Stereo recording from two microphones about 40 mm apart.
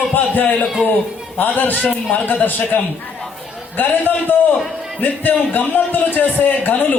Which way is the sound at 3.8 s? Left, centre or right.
Left.